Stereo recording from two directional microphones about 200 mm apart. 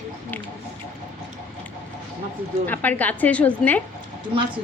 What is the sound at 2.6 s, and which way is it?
A woman's voice, 10° left (ahead or behind).